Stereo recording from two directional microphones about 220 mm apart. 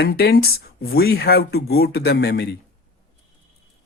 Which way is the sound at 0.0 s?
45° left (ahead or behind).